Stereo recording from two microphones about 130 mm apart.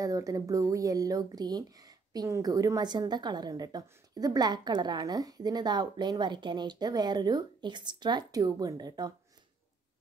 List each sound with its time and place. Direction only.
0.0 s speech: 25° right (ahead or behind)